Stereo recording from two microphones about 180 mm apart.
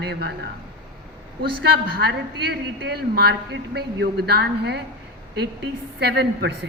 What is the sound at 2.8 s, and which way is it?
Speech, 60° right (ahead or behind).